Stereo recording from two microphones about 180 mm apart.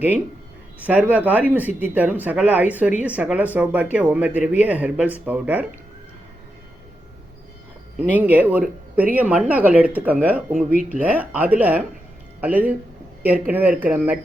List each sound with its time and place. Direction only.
0.8 s speech: 10° right (ahead or behind)
8.1 s speech: 10° right (ahead or behind)
10.5 s speech: 45° right (ahead or behind)
11.0 s speech: 10° right (ahead or behind)